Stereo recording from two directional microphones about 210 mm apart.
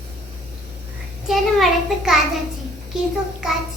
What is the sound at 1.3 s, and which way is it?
Speech, centre (ahead or behind).